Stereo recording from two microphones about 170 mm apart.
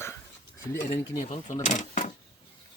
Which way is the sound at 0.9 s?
40° left (ahead or behind).